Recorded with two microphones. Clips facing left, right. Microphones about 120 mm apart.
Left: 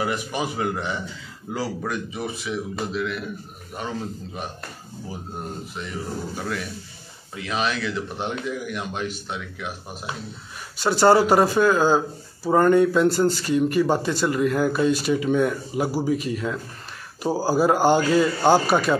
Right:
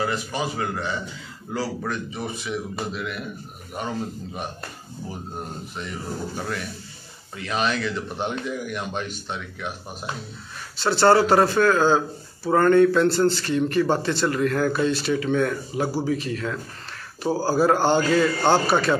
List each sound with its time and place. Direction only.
0.0 s speech: 15° left (ahead or behind)
1.8 s a man's voice: 5° left (ahead or behind)
6.3 s a man's voice: centre (ahead or behind)